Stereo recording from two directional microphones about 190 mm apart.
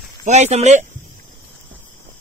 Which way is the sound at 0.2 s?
35° right (ahead or behind).